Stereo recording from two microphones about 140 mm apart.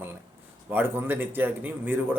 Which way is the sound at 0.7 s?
15° right (ahead or behind).